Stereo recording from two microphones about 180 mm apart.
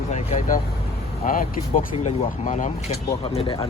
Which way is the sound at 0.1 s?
45° left (ahead or behind).